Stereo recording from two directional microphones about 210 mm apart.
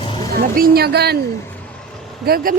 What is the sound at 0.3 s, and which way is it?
Speech, 45° right (ahead or behind).